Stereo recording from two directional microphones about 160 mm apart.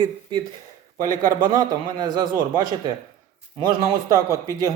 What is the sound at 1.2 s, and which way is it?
Speech, 60° right (ahead or behind).